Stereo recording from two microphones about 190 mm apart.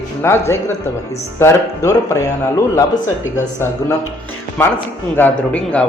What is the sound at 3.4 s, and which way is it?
Speech, 10° left (ahead or behind).